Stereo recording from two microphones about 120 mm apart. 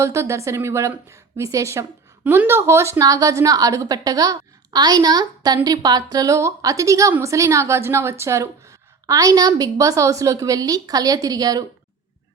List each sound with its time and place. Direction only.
0.0 s a woman's voice: 25° right (ahead or behind)